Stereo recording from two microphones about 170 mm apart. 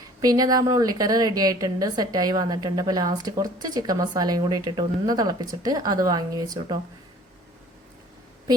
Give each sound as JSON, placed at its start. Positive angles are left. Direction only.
{"t": 0.2, "sound": "a woman's voice", "side_deg": -20}